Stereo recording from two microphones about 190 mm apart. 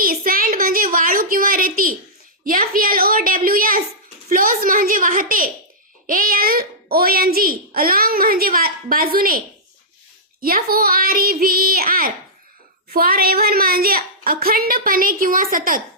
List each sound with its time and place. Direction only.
0.0 s a sound: 50° right (ahead or behind)
2.4 s a woman's voice: 50° right (ahead or behind)
10.4 s a woman's voice: 50° right (ahead or behind)